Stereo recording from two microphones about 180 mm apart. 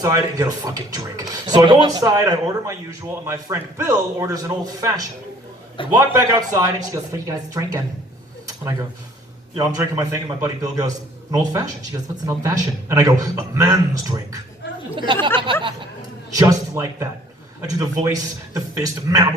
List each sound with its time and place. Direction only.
0.0 s a man's voice: 20° right (ahead or behind)
9.6 s a man's voice: 20° right (ahead or behind)